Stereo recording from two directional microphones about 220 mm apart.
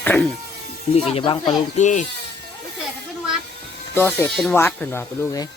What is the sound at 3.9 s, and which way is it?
Speech, 10° left (ahead or behind).